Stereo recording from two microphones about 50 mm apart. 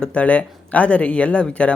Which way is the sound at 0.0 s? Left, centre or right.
Left.